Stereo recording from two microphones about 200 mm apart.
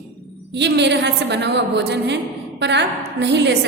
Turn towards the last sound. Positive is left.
turn(degrees=-60)  # may be behind; listen again after turning